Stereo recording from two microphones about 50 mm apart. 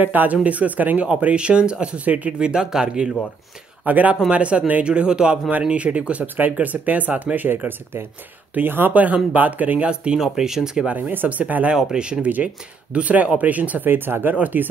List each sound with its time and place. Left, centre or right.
0.0 s speech: right
1.0 s speech: right
2.3 s speech: centre
3.8 s speech: right
6.2 s speech: right
7.5 s speech: right
9.8 s speech: centre
11.0 s speech: right
11.7 s speech: centre; by 13.8 s right
13.8 s speech: right
14.3 s speech: right